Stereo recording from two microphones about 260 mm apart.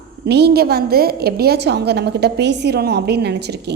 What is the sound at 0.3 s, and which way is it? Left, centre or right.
A woman's voice, right.